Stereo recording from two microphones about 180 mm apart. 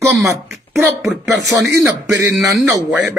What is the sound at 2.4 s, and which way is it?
Speech, centre (ahead or behind).